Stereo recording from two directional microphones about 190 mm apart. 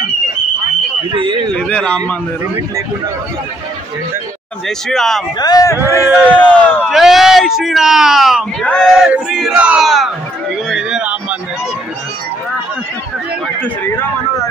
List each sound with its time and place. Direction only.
1.1 s a man's voice: 25° right (ahead or behind)
1.5 s speech: 5° left (ahead or behind)
4.6 s speech: centre (ahead or behind)
5.4 s a man's voice: 20° left (ahead or behind)
6.9 s speech: centre (ahead or behind)
10.7 s a sound: 5° right (ahead or behind)